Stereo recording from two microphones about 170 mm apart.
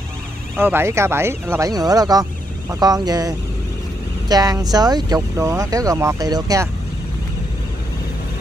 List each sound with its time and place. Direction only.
0.6 s speech: 15° right (ahead or behind)